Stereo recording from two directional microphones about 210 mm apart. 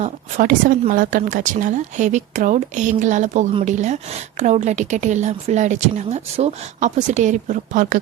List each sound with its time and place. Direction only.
0.0 s speech: 35° right (ahead or behind)